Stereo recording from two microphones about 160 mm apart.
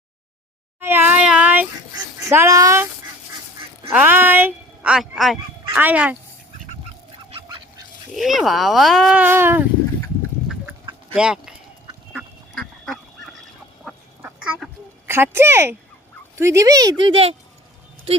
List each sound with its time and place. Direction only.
0.8 s a sound: 15° right (ahead or behind)
2.3 s a woman's voice: 20° right (ahead or behind)
3.8 s a woman's voice: 10° right (ahead or behind)
8.1 s speech: centre (ahead or behind)
10.7 s chicken: 10° right (ahead or behind)
12.5 s duck: 5° left (ahead or behind); by 14.5 s 15° right (ahead or behind)
15.0 s a woman's voice: 15° right (ahead or behind); by 17.3 s 35° right (ahead or behind)